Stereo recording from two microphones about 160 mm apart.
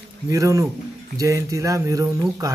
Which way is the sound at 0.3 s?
20° right (ahead or behind).